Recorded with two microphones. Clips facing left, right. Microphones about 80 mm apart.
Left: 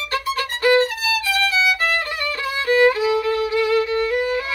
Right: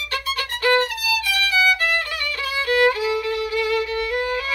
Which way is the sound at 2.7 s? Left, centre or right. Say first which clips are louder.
Left 3 dB; left.